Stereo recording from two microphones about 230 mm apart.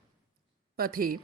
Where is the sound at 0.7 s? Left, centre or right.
Right.